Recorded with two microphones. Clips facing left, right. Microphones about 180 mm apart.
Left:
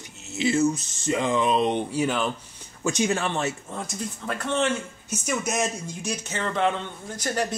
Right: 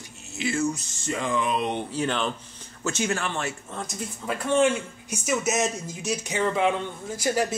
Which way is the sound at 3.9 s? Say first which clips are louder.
Right 1 dB; 5° right (ahead or behind).